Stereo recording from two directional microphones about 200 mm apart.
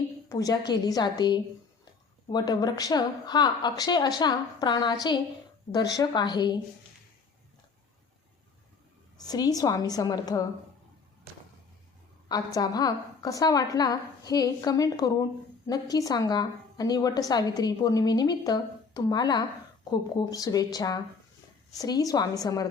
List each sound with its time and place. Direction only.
0.3 s a woman's voice: 20° left (ahead or behind)
9.1 s a woman's voice: 20° left (ahead or behind)
12.3 s a woman's voice: 20° left (ahead or behind)